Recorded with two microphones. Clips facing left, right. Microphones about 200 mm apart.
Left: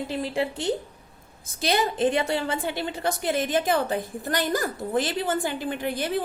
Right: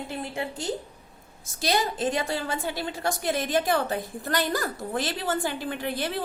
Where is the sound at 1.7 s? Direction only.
55° left (ahead or behind).